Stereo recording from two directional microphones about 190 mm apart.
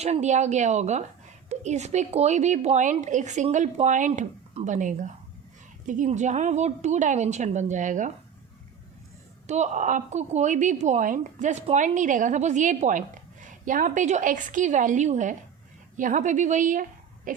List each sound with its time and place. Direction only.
0.0 s speech: 35° right (ahead or behind)
9.5 s speech: 40° right (ahead or behind)
17.3 s a sound: 45° right (ahead or behind)